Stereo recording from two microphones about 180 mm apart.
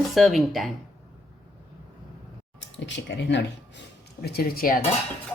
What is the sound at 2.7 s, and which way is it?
Speech, 80° left.